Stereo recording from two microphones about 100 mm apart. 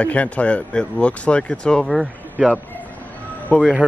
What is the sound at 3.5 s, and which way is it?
Speech, 20° left (ahead or behind).